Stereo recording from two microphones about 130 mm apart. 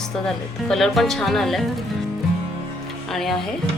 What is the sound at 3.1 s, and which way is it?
Speech, centre (ahead or behind).